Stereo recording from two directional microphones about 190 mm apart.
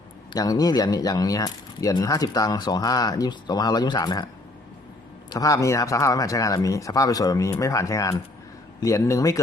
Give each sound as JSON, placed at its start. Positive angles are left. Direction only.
{"t": 0.3, "sound": "speech", "side_deg": 20}
{"t": 5.3, "sound": "speech", "side_deg": 15}